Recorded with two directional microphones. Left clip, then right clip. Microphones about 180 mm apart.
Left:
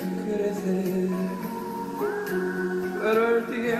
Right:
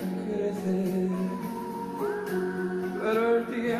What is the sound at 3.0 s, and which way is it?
Music, 35° left (ahead or behind).